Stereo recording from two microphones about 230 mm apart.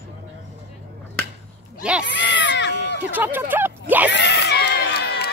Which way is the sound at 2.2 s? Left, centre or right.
Left.